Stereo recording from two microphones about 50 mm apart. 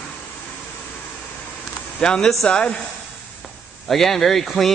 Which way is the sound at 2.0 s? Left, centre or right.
Centre.